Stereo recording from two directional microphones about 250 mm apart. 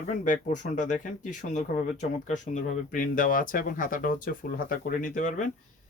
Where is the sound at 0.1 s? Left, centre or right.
Left.